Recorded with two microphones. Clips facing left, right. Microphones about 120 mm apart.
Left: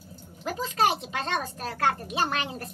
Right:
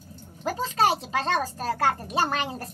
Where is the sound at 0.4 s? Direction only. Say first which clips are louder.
Right 2 dB; 35° right (ahead or behind).